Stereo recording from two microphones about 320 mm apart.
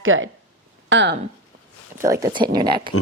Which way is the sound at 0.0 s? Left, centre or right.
Right.